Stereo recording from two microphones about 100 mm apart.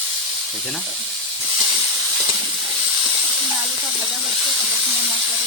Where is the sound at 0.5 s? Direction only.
Centre (ahead or behind).